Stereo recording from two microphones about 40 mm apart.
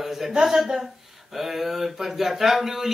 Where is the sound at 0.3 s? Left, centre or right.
Centre.